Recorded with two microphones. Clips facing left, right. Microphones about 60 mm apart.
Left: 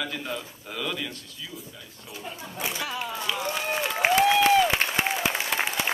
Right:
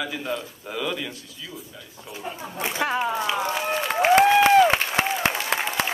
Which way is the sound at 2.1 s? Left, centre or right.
Centre.